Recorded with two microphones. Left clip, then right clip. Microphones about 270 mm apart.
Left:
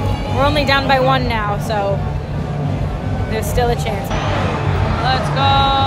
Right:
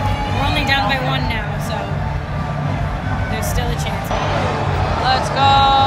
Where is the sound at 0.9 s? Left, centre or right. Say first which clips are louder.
Left 6 dB; centre.